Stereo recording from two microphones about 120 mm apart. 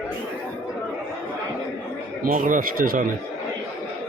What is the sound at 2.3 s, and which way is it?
Speech, 90° right.